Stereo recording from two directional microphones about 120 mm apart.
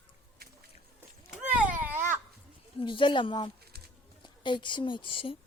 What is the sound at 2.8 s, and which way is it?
Speech, 45° left (ahead or behind).